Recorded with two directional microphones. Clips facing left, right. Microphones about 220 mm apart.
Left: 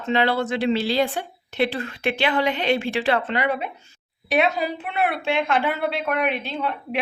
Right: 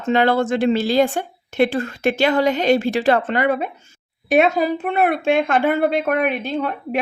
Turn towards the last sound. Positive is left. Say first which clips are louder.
# right 4 dB
turn(degrees=-45)  # may be behind; listen again after turning